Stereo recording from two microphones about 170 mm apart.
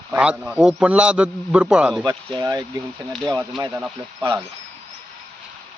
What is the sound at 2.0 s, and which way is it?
Speech, 20° right (ahead or behind).